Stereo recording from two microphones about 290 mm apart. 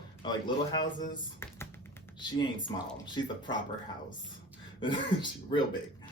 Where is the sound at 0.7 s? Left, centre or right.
Centre.